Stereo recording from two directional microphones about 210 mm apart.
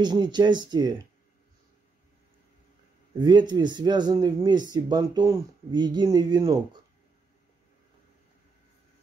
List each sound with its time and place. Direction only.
0.0 s speech: 20° right (ahead or behind)
3.2 s speech: 20° right (ahead or behind)